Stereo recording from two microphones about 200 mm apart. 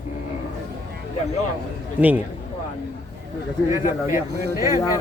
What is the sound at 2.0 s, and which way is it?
Speech, 10° right (ahead or behind).